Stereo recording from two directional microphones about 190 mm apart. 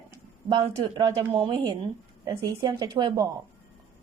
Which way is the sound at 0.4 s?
25° right (ahead or behind).